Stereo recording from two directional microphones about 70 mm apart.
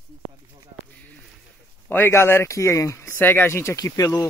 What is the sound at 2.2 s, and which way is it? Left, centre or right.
Speech, left.